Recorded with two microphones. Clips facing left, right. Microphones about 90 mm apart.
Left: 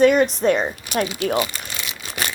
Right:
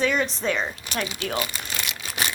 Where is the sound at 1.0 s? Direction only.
40° left (ahead or behind).